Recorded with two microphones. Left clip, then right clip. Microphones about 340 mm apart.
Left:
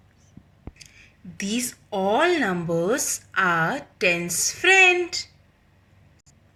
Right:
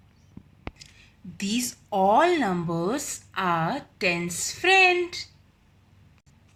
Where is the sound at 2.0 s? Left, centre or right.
Centre.